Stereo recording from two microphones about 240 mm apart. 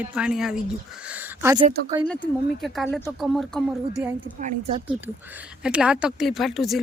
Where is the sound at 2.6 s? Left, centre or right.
Centre.